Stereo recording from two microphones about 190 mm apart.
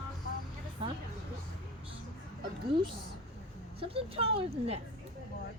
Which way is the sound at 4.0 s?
30° right (ahead or behind).